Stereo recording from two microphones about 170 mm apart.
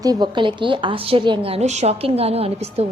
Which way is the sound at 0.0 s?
25° right (ahead or behind).